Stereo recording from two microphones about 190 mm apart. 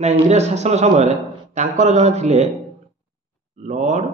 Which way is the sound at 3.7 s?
40° right (ahead or behind).